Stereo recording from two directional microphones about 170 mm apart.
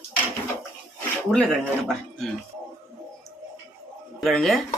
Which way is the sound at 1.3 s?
5° left (ahead or behind).